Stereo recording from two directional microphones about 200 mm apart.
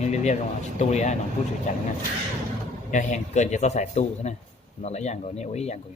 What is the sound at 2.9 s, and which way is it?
A man's voice, 40° left (ahead or behind).